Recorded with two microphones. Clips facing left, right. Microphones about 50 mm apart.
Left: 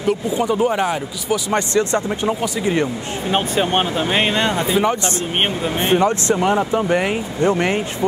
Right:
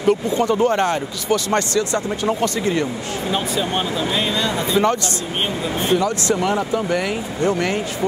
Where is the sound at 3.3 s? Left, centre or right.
Left.